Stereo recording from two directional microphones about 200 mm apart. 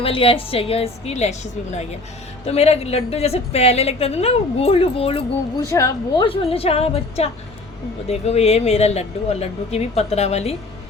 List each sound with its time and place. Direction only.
0.0 s a woman's voice: 25° left (ahead or behind)
5.7 s speech: 15° left (ahead or behind)
6.2 s a woman's voice: 25° left (ahead or behind)